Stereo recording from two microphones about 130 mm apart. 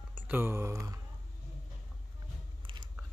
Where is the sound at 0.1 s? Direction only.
15° right (ahead or behind).